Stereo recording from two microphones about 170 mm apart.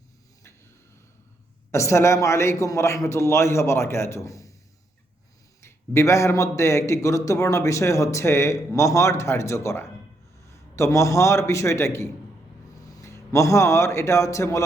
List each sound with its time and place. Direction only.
1.7 s a man's voice: 15° left (ahead or behind)
5.6 s a man's voice: 15° left (ahead or behind)